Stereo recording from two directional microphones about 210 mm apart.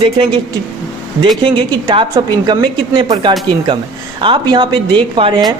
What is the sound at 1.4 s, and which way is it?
Speech, 20° right (ahead or behind).